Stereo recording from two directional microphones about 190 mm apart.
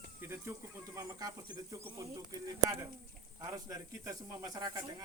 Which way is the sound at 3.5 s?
20° right (ahead or behind).